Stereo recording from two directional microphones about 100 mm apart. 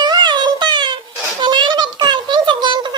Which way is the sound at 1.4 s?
50° right (ahead or behind).